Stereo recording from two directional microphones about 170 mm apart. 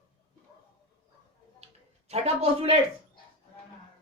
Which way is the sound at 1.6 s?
40° right (ahead or behind).